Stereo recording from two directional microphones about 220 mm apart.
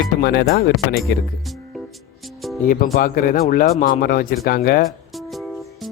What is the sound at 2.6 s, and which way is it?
Speech, 40° left (ahead or behind).